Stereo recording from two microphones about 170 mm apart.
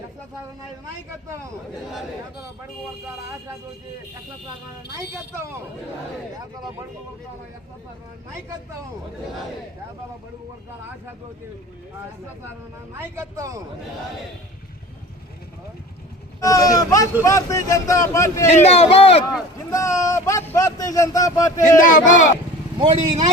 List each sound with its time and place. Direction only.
13.0 s a man's voice: 15° right (ahead or behind)
16.4 s speech: 20° left (ahead or behind)
18.4 s a man's voice: 40° left (ahead or behind)
19.7 s speech: 20° left (ahead or behind)
21.8 s speech: 50° left (ahead or behind)
22.8 s speech: 35° right (ahead or behind)